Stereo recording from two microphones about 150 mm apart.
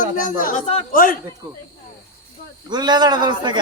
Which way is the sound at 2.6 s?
30° right (ahead or behind).